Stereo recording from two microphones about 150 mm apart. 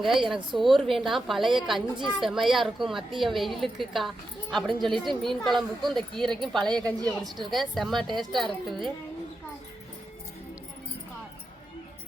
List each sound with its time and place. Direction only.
0.0 s a woman's voice: centre (ahead or behind)
6.9 s a woman's voice: 25° right (ahead or behind)
7.3 s a woman's voice: centre (ahead or behind)